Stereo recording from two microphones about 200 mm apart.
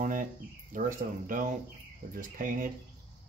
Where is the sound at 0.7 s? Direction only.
40° right (ahead or behind).